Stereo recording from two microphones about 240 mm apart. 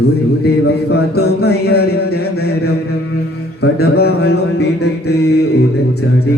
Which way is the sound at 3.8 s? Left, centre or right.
Left.